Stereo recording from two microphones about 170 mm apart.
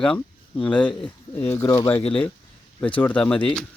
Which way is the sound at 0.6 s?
10° left (ahead or behind).